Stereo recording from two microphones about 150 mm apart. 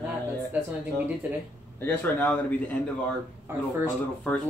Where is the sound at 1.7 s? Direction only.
15° left (ahead or behind).